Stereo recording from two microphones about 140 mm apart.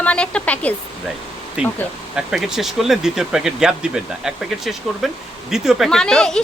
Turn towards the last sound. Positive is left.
turn(degrees=5)  # may be behind; listen again after turning